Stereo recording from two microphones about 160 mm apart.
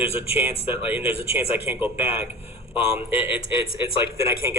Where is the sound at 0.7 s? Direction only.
10° right (ahead or behind).